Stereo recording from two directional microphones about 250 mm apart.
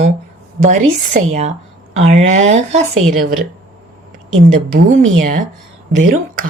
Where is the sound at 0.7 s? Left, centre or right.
Right.